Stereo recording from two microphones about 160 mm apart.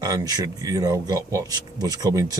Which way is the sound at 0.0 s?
25° right (ahead or behind).